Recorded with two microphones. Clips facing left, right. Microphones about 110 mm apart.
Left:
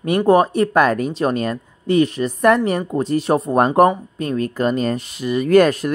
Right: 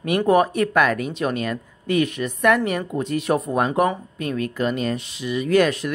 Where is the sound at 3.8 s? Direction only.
45° left (ahead or behind).